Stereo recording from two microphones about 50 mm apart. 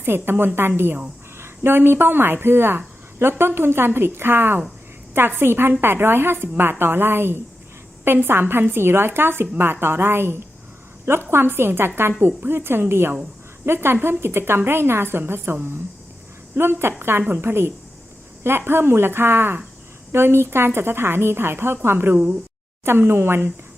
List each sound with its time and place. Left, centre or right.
0.0 s speech: right